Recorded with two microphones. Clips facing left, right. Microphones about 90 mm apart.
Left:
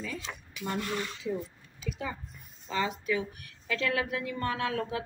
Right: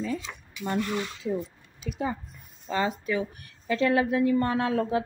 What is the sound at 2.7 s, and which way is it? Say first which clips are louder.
A woman's voice: right 3 dB; 35° right (ahead or behind).